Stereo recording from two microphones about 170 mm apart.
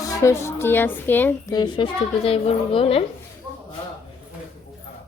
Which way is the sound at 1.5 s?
25° left (ahead or behind).